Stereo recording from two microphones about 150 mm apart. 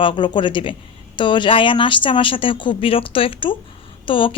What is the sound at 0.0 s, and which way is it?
Speech, 35° left (ahead or behind).